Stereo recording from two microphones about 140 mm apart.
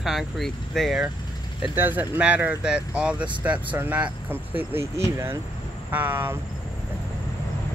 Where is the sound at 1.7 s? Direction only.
15° right (ahead or behind).